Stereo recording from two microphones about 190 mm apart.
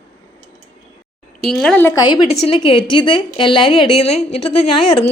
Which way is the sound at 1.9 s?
20° left (ahead or behind).